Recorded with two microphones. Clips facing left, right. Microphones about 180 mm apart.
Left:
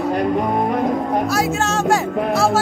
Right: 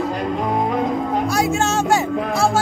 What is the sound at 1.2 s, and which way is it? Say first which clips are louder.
Music: even; centre (ahead or behind).